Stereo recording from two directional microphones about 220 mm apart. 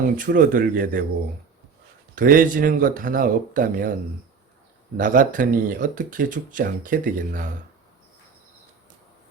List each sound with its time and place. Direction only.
0.2 s speech: 40° right (ahead or behind)
2.1 s speech: 40° right (ahead or behind)
4.9 s speech: 35° right (ahead or behind)